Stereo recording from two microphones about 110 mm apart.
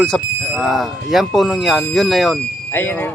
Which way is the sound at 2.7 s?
20° left (ahead or behind).